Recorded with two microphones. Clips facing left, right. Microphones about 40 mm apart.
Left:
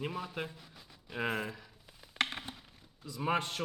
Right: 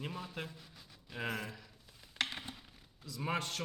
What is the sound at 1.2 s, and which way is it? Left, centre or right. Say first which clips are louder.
Speech: left 4 dB; left.